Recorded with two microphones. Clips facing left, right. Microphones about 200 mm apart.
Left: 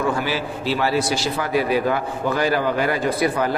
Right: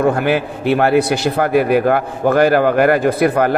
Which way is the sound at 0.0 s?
60° right (ahead or behind).